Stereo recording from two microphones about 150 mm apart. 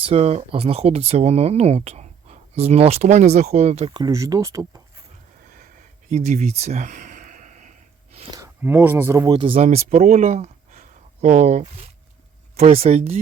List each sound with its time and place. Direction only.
0.0 s speech: 45° right (ahead or behind)
3.9 s speech: 25° right (ahead or behind)
6.1 s a sound: 50° right (ahead or behind)
8.4 s speech: 15° right (ahead or behind)
9.3 s speech: 35° right (ahead or behind)
9.6 s speech: 50° right (ahead or behind)
10.2 s a sound: 50° right (ahead or behind)
12.5 s speech: 40° right (ahead or behind)